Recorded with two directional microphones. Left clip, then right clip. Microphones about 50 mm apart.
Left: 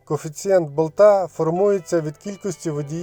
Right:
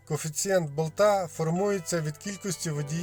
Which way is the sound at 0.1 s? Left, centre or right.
Left.